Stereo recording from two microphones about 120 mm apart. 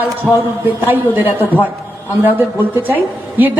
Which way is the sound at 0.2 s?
Centre (ahead or behind).